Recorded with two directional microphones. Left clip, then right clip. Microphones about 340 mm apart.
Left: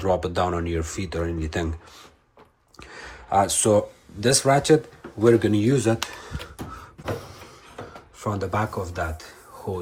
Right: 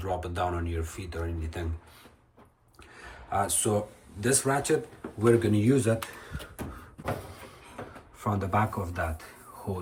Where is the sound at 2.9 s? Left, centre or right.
Centre.